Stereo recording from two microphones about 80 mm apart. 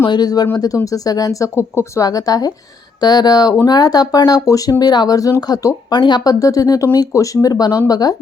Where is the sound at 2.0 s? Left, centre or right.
Left.